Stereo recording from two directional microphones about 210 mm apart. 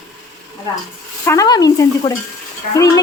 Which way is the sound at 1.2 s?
20° left (ahead or behind).